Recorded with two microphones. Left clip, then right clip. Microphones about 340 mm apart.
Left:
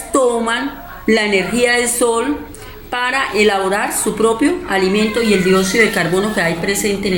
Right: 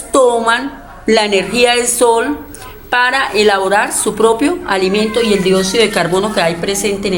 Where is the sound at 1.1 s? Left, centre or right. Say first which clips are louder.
Right 3 dB; right.